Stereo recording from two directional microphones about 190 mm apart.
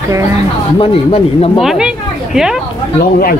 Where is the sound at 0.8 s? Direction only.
30° left (ahead or behind).